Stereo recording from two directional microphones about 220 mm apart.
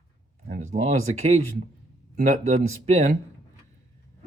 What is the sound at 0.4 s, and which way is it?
Speech, 40° right (ahead or behind).